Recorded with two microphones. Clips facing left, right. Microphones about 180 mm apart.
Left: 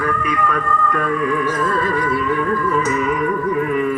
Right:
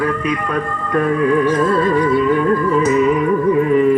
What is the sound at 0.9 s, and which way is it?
Music, 30° right (ahead or behind).